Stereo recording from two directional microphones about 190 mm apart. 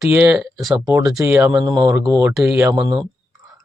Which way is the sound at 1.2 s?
15° right (ahead or behind).